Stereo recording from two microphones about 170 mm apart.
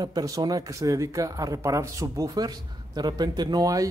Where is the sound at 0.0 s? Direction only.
20° right (ahead or behind).